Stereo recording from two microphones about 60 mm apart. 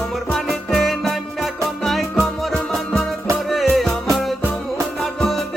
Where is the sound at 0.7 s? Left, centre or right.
Centre.